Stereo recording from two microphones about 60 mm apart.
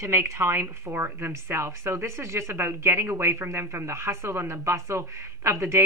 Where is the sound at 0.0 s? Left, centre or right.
Right.